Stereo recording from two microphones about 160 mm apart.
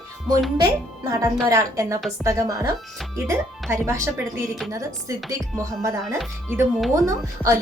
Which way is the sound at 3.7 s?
20° right (ahead or behind).